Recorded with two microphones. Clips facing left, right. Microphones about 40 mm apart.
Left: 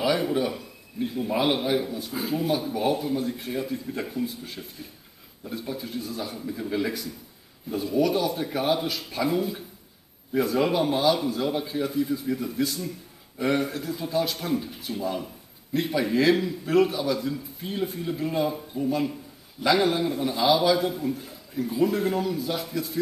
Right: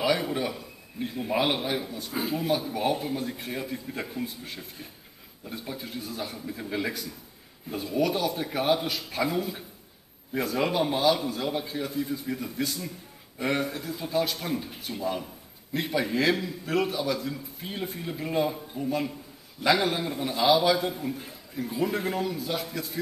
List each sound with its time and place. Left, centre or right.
0.0 s a man's voice: centre
10.3 s a man's voice: centre